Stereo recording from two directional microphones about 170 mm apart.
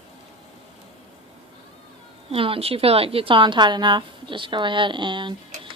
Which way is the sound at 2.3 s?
35° right (ahead or behind).